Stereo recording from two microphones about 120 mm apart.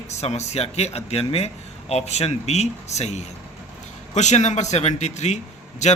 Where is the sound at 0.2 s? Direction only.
65° left (ahead or behind).